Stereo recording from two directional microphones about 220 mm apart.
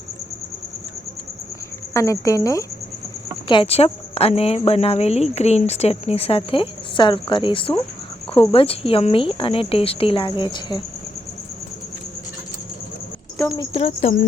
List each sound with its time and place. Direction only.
1.9 s speech: 15° left (ahead or behind)
3.5 s speech: 25° left (ahead or behind)
13.5 s speech: 20° left (ahead or behind)